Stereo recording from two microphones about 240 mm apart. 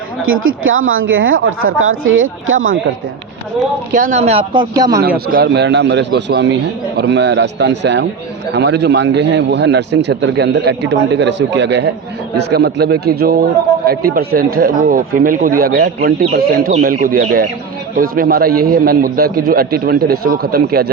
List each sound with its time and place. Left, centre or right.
0.2 s speech: right
3.9 s speech: right; by 5.0 s centre
5.0 s a man's voice: right